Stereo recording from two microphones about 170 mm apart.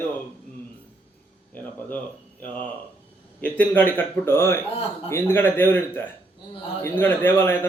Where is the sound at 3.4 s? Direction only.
10° left (ahead or behind).